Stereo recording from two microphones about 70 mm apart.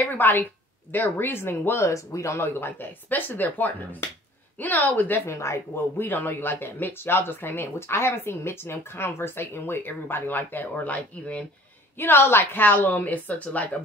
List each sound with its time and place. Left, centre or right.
0.0 s speech: left
1.9 s speech: left
6.0 s speech: left
12.0 s speech: left